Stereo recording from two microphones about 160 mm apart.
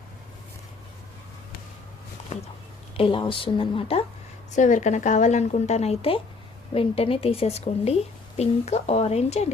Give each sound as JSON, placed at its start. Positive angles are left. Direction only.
{"t": 3.0, "sound": "a woman's voice", "side_deg": 30}
{"t": 4.5, "sound": "a woman's voice", "side_deg": 50}